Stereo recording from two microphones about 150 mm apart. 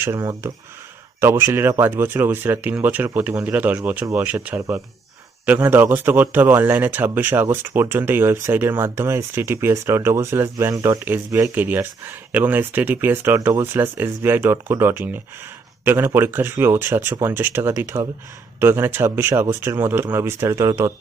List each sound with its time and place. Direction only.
0.0 s speech: 20° right (ahead or behind)